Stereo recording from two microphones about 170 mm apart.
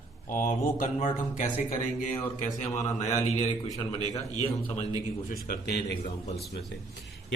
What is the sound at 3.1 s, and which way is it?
Speech, 40° left (ahead or behind).